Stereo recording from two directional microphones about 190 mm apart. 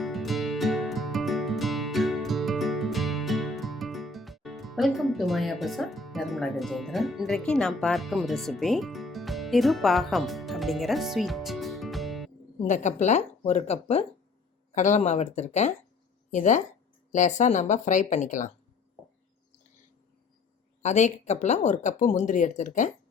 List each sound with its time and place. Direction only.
0.0 s music: centre (ahead or behind)
12.6 s speech: 40° left (ahead or behind)
20.8 s speech: 35° left (ahead or behind)